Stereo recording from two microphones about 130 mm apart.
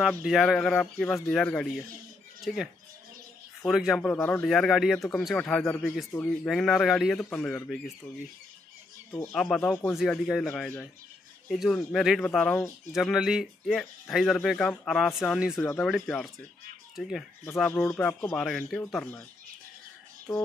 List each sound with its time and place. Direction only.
0.2 s speech: centre (ahead or behind)
4.0 s a man's voice: 15° left (ahead or behind)
4.4 s a man's voice: centre (ahead or behind)
9.3 s a man's voice: 5° left (ahead or behind)
12.9 s speech: centre (ahead or behind)
15.8 s speech: 5° left (ahead or behind)
17.6 s a man's voice: 15° left (ahead or behind)